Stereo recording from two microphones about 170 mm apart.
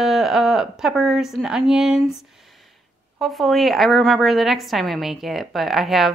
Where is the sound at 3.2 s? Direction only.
Centre (ahead or behind).